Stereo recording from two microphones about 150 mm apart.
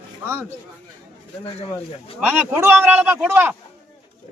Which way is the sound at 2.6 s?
10° right (ahead or behind).